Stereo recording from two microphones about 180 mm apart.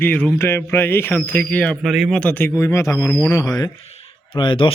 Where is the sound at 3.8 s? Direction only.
30° left (ahead or behind).